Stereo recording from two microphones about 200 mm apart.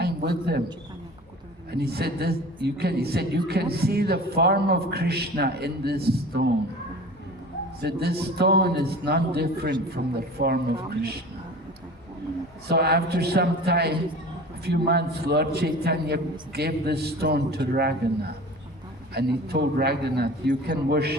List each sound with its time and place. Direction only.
0.0 s a sound: 50° right (ahead or behind)
1.7 s a man's voice: 55° right (ahead or behind)
7.8 s a man's voice: 50° right (ahead or behind)
12.6 s a man's voice: 55° right (ahead or behind)
19.1 s a man's voice: 55° right (ahead or behind)